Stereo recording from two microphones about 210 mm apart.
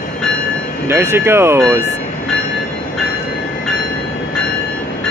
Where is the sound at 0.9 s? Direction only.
10° right (ahead or behind).